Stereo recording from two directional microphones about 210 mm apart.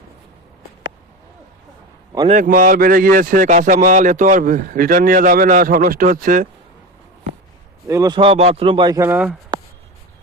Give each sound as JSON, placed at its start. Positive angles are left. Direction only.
{"t": 2.2, "sound": "speech", "side_deg": -35}
{"t": 7.9, "sound": "a man's voice", "side_deg": -15}